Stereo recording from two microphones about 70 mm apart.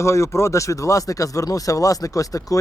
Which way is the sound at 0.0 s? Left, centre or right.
Left.